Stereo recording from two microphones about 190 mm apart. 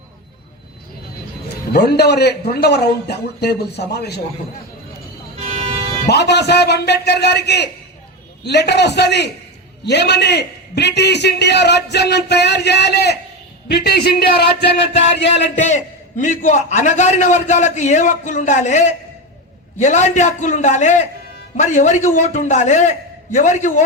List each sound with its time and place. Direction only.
1.7 s a man's voice: 60° left (ahead or behind)
5.5 s vehicle: 35° right (ahead or behind)
6.1 s a man's voice: 60° left (ahead or behind)
15.5 s a man's voice: 40° left (ahead or behind)